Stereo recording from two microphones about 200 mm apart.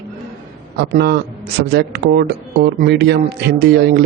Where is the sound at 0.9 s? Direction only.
55° right (ahead or behind).